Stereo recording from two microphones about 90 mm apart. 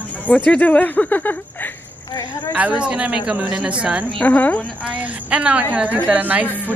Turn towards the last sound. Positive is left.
turn(degrees=-15)  # may be behind; listen again after turning